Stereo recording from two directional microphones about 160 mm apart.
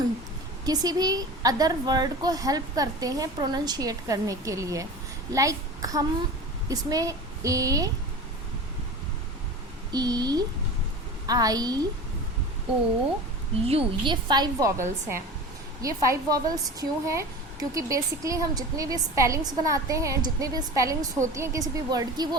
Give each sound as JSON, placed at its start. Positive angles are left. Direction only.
{"t": 0.6, "sound": "a woman's voice", "side_deg": -25}
{"t": 9.9, "sound": "a woman's voice", "side_deg": -25}
{"t": 13.7, "sound": "a woman's voice", "side_deg": -35}